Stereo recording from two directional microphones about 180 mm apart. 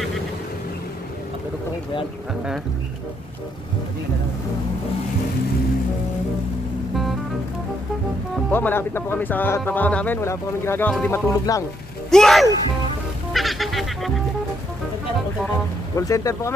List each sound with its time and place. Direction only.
8.5 s speech: 10° left (ahead or behind)
12.1 s speech: centre (ahead or behind)
13.3 s music: centre (ahead or behind)
16.0 s speech: 20° left (ahead or behind)